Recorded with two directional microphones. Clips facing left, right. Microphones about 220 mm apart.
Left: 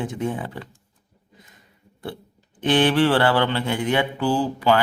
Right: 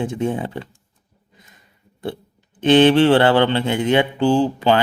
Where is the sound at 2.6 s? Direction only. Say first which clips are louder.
Right 6 dB; 25° right (ahead or behind).